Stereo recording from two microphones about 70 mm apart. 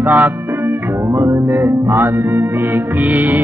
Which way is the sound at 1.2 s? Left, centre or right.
Right.